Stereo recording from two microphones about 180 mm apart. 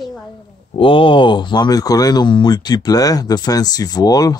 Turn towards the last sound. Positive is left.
turn(degrees=20)  # may be behind; listen again after turning